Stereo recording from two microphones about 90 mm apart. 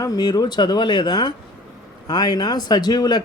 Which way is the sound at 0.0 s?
45° left (ahead or behind).